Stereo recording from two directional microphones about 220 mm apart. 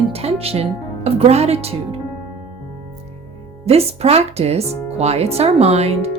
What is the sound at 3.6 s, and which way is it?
Speech, 30° right (ahead or behind).